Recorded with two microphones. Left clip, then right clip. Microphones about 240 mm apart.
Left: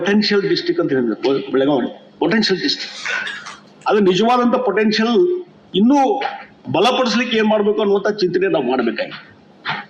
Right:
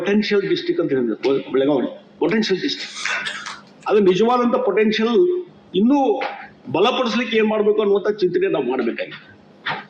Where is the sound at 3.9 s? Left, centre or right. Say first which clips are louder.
Left 1 dB; left.